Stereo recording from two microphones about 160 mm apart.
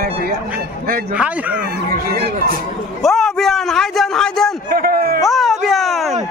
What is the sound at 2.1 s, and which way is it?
Speech, 90° right.